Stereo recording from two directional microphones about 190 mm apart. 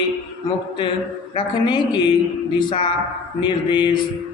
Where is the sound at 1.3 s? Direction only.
25° left (ahead or behind).